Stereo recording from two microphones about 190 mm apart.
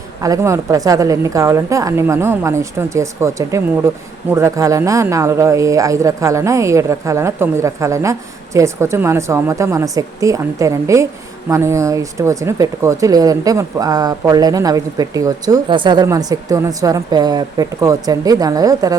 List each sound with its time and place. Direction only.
0.2 s speech: 15° right (ahead or behind)